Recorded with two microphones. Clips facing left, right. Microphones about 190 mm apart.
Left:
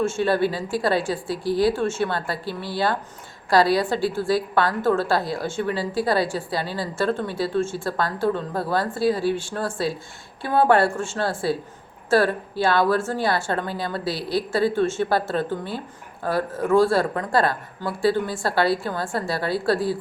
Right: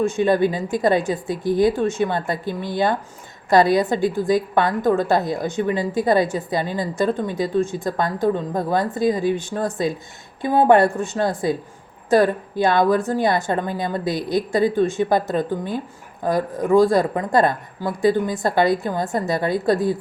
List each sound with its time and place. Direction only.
0.0 s a woman's voice: 15° right (ahead or behind)